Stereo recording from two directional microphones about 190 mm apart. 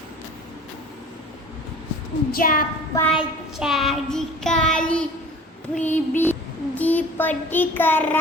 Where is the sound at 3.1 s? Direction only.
5° right (ahead or behind).